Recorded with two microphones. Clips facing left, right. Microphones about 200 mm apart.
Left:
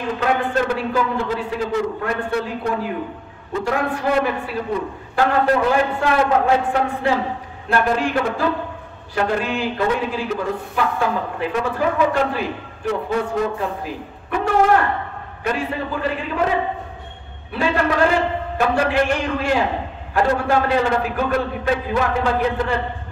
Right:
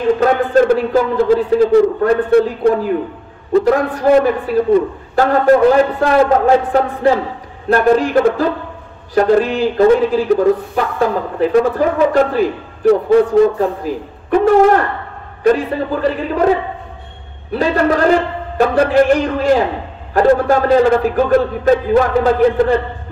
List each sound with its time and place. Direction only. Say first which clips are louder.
0.2 s a man's voice: right 4 dB; 40° right (ahead or behind)